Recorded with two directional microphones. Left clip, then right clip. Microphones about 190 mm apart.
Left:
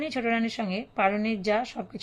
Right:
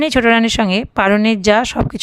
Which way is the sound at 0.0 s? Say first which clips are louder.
Right 15 dB; 45° right (ahead or behind).